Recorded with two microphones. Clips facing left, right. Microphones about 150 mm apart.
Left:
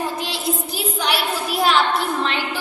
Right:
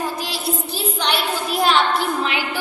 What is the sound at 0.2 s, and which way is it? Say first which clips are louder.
Child singing: left 1 dB; 25° left (ahead or behind).